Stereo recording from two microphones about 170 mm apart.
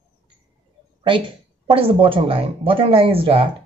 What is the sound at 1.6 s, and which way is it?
A woman's voice, 30° right (ahead or behind).